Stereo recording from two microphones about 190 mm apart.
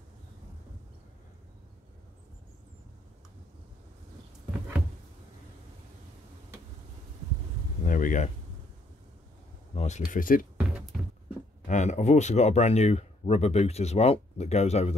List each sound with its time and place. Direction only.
7.8 s a sound: 45° left (ahead or behind)
9.8 s speech: 40° left (ahead or behind)
11.6 s speech: 40° left (ahead or behind)